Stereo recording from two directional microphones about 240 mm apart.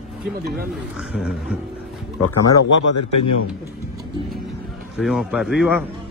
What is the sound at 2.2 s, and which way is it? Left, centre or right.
Speech, left.